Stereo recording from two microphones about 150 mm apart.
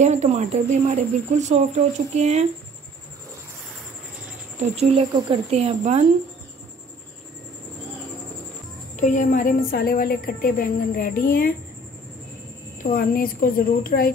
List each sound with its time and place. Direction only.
0.0 s speech: 50° right (ahead or behind)
4.7 s speech: 45° right (ahead or behind)
8.9 s a woman's voice: 55° left (ahead or behind); by 11.5 s 75° left (ahead or behind)
12.8 s a woman's voice: 75° left (ahead or behind)